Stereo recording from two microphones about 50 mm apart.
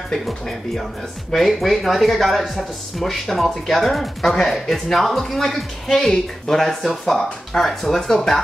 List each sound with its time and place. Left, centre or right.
0.1 s speech: centre